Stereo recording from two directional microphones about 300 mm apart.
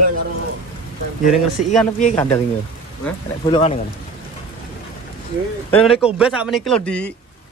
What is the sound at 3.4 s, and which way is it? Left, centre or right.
Speech, centre.